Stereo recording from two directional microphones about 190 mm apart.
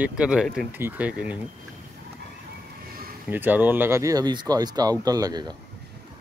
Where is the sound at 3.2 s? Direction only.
10° right (ahead or behind).